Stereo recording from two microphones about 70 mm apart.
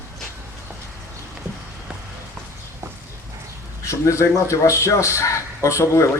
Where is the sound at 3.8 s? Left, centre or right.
Left.